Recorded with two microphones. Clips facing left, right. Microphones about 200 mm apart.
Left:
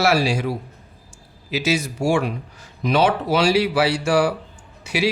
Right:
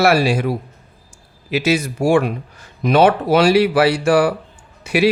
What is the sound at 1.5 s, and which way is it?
Speech, 55° right (ahead or behind).